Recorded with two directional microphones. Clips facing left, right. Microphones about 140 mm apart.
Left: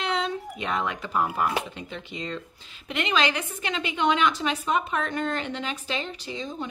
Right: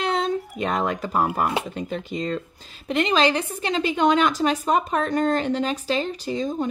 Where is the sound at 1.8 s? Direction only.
40° right (ahead or behind).